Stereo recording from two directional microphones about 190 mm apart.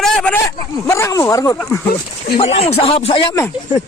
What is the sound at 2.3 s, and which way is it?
Speech, 30° left (ahead or behind).